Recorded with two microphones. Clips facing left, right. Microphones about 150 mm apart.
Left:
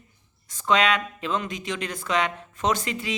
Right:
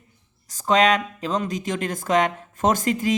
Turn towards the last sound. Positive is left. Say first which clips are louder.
# right 5 dB
turn(degrees=-45)  # may be behind; listen again after turning